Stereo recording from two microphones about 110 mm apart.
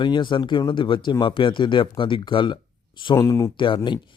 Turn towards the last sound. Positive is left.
turn(degrees=50)  # may be behind; listen again after turning